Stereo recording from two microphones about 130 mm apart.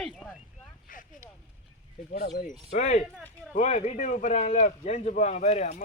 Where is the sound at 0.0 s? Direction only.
5° left (ahead or behind).